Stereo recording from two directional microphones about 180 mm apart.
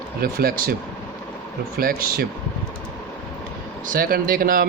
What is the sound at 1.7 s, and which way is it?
Speech, 55° right (ahead or behind).